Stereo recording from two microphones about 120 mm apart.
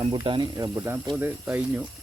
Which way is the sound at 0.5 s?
25° right (ahead or behind).